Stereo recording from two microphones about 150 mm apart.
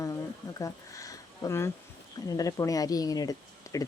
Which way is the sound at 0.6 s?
20° left (ahead or behind).